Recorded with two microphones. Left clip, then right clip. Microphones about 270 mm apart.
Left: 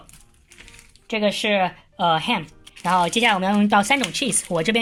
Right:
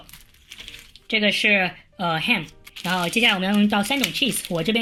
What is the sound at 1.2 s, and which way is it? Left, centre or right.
Speech, left.